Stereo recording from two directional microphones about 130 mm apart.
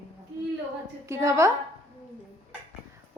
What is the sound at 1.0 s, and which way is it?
Speech, 20° right (ahead or behind).